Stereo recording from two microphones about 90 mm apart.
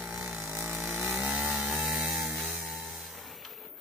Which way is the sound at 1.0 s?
10° right (ahead or behind).